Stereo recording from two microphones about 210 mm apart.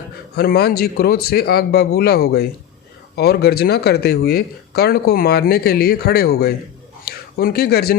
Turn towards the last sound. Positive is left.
turn(degrees=50)  # may be behind; listen again after turning